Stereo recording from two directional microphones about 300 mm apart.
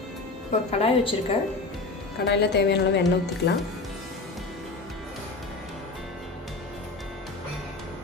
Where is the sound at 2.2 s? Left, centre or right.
Left.